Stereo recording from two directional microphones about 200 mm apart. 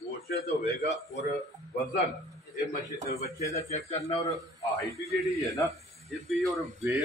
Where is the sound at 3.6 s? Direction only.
35° left (ahead or behind).